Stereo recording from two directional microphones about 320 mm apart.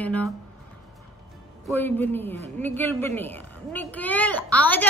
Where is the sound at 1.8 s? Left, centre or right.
Centre.